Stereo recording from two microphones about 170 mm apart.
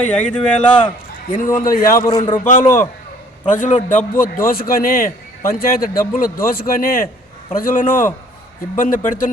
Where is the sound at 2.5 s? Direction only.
50° left (ahead or behind).